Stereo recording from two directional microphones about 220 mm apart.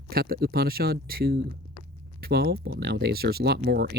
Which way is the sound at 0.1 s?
45° right (ahead or behind).